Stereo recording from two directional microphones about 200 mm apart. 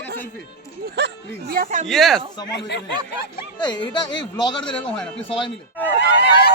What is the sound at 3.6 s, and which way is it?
Speech, 20° left (ahead or behind).